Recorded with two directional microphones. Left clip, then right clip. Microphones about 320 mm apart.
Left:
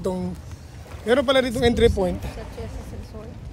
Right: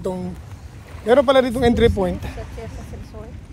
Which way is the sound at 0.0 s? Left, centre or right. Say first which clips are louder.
Right 1 dB; centre.